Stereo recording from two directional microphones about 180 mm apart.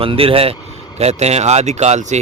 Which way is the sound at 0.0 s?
30° right (ahead or behind).